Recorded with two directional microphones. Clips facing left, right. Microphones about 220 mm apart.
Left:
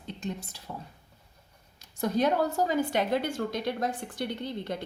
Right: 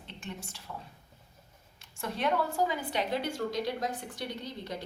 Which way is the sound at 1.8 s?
40° left (ahead or behind).